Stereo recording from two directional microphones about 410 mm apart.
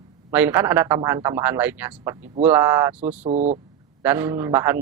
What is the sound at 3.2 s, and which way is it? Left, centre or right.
Speech, centre.